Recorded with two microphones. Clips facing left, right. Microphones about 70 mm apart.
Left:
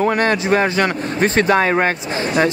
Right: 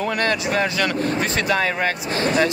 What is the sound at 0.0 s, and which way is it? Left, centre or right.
Speech, left.